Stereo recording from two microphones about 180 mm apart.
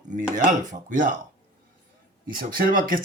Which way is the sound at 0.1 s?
45° right (ahead or behind).